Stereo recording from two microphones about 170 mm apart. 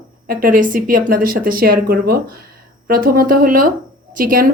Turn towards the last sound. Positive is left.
turn(degrees=-55)  # may be behind; listen again after turning